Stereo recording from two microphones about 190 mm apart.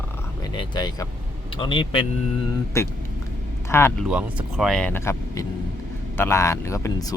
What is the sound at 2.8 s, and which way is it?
Speech, 15° left (ahead or behind).